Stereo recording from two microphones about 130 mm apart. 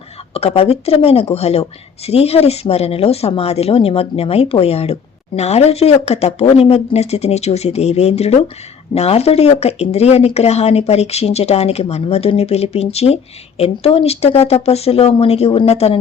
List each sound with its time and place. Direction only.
0.3 s speech: 50° left (ahead or behind)